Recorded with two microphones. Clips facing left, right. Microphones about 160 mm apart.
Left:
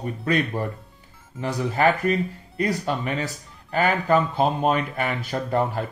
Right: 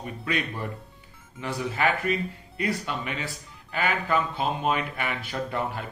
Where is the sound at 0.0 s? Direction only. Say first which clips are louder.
Left 6 dB; 40° left (ahead or behind).